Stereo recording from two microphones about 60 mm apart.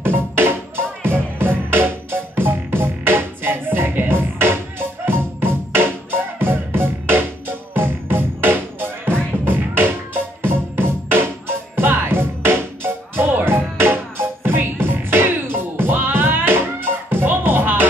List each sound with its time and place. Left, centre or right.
0.0 s music: right